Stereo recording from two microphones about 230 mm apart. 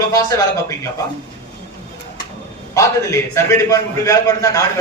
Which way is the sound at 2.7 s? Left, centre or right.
Centre.